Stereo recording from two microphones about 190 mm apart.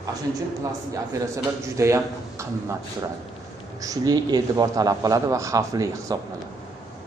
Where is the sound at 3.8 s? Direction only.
20° right (ahead or behind).